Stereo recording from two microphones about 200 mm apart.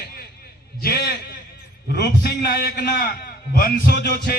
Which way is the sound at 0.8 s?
50° left (ahead or behind).